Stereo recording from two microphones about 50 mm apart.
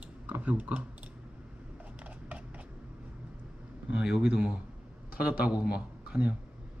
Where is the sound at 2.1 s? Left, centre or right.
Right.